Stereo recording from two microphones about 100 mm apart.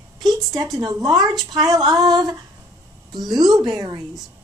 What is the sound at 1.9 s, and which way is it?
Female singing, 40° right (ahead or behind).